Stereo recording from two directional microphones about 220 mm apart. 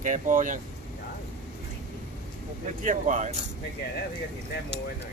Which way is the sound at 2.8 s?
35° right (ahead or behind).